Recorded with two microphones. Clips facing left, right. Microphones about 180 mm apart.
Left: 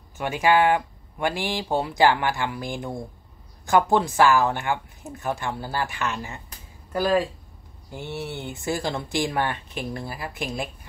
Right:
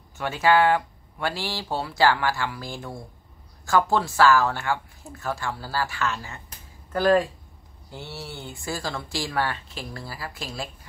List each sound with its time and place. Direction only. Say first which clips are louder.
0.2 s speech: even; 15° left (ahead or behind)